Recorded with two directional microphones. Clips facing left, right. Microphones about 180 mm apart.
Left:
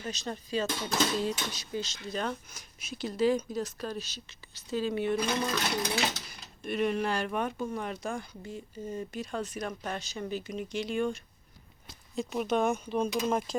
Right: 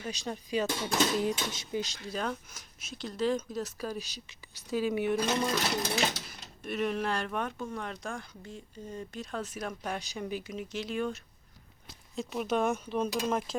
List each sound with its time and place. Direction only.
0.0 s speech: 10° right (ahead or behind)
2.1 s speech: centre (ahead or behind)
6.7 s speech: centre (ahead or behind)